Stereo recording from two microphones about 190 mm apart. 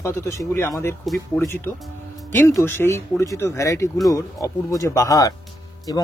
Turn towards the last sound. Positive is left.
turn(degrees=20)  # may be behind; listen again after turning